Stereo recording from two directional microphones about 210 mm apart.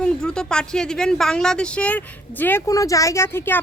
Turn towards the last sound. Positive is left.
turn(degrees=10)  # may be behind; listen again after turning